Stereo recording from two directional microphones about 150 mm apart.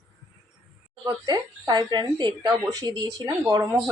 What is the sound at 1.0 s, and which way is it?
A woman's voice, 25° right (ahead or behind).